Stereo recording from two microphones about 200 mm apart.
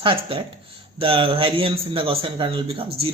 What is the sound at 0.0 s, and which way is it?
A man's voice, 25° right (ahead or behind).